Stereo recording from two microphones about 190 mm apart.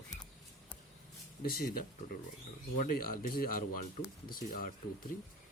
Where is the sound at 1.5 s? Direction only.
50° left (ahead or behind).